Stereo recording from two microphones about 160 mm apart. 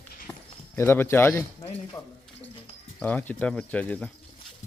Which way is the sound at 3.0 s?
10° left (ahead or behind).